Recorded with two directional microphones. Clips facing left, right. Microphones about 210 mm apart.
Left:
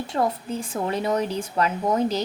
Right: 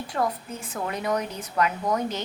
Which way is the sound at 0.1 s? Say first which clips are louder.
Left 3 dB; 30° left (ahead or behind).